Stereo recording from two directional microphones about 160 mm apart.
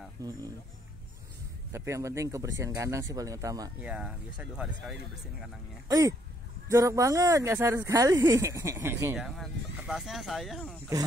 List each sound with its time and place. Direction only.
0.2 s speech: 25° right (ahead or behind)
1.7 s speech: 20° right (ahead or behind)
3.8 s speech: 5° right (ahead or behind)
5.9 s speech: 20° right (ahead or behind)
9.2 s speech: 5° right (ahead or behind)